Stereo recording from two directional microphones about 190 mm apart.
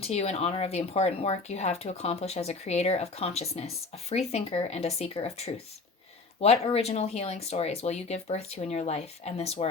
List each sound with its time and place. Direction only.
0.0 s speech: 35° left (ahead or behind)